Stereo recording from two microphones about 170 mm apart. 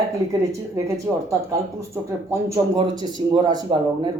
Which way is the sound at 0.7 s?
20° right (ahead or behind).